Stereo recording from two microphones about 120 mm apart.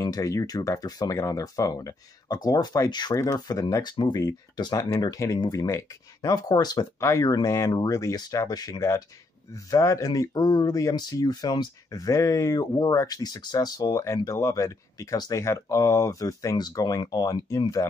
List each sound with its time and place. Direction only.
0.0 s speech: 30° left (ahead or behind)